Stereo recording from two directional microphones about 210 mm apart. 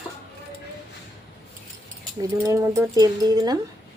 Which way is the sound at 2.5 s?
15° right (ahead or behind).